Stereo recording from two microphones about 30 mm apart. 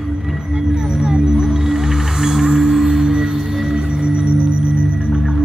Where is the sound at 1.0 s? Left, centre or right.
Right.